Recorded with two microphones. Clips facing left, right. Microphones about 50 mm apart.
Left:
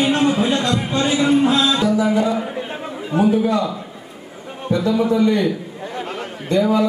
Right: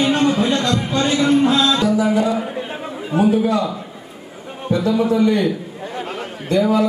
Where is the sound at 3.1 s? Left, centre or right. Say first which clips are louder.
Right 1 dB; centre.